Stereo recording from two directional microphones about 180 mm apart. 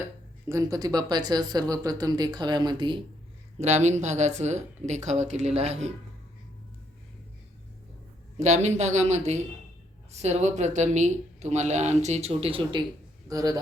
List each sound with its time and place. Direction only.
0.4 s speech: 15° right (ahead or behind)
3.6 s speech: 40° right (ahead or behind)
8.4 s speech: 40° right (ahead or behind)
13.2 s a man's voice: 20° right (ahead or behind)